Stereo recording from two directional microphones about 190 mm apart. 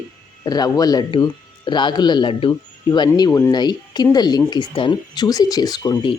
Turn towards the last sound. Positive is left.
turn(degrees=25)  # may be behind; listen again after turning